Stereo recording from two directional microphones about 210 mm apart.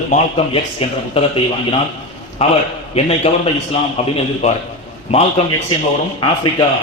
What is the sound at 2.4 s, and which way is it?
A man's voice, 30° left (ahead or behind).